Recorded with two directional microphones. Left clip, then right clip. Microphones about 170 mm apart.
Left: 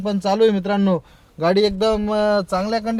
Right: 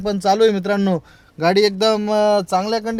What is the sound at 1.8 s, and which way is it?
A man's voice, 55° right (ahead or behind).